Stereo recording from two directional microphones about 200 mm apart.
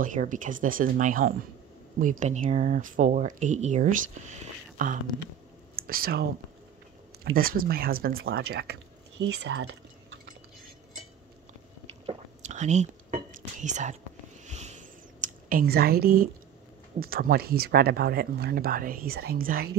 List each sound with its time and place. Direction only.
0.0 s speech: 40° right (ahead or behind)
7.3 s speech: 45° right (ahead or behind); by 9.8 s 65° right (ahead or behind)
12.1 s whispering: 35° right (ahead or behind)
14.4 s a sound: 35° right (ahead or behind)
17.0 s speech: 45° right (ahead or behind)